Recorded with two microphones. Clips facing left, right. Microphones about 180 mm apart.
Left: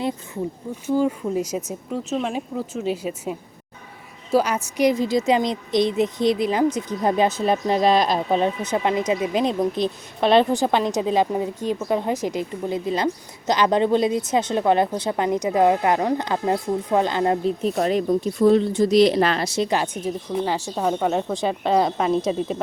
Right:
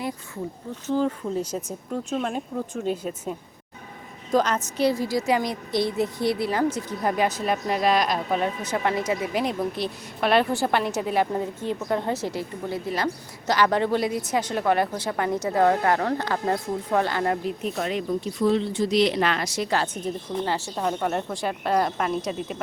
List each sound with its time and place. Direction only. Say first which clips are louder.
0.9 s speech: left 3 dB; 10° left (ahead or behind); by 22.6 s 30° left (ahead or behind)